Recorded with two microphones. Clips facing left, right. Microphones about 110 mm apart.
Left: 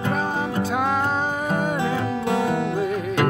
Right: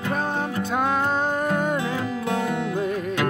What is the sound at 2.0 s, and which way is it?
Music, 30° left (ahead or behind).